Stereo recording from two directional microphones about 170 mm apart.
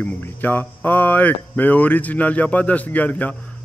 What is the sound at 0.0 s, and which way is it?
A man's voice, 10° left (ahead or behind).